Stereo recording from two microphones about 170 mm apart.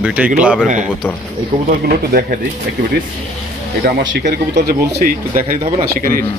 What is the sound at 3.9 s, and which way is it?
Speech, 75° right (ahead or behind).